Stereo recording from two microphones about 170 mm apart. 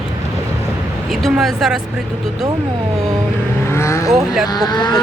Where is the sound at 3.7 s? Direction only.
15° left (ahead or behind).